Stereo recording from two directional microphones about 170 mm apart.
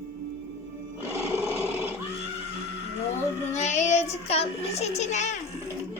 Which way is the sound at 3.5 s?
45° left (ahead or behind).